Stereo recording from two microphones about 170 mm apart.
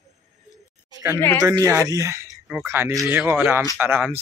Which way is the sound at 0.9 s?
15° right (ahead or behind).